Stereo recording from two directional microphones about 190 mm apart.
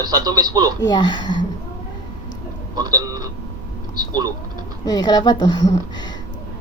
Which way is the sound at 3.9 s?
20° right (ahead or behind).